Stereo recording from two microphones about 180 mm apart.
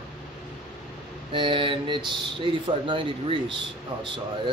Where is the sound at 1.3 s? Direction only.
30° right (ahead or behind).